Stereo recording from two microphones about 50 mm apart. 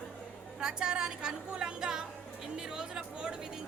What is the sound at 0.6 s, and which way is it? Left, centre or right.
A woman's voice, centre.